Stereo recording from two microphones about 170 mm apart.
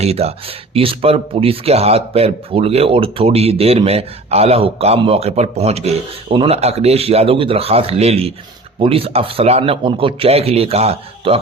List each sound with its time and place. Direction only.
0.0 s speech: 35° right (ahead or behind)